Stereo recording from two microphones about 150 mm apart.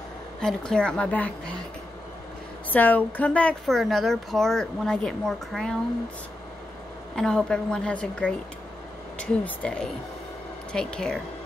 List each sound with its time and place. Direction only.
0.4 s a woman's voice: 5° left (ahead or behind)
2.7 s a woman's voice: 10° left (ahead or behind)
7.2 s a woman's voice: 5° left (ahead or behind)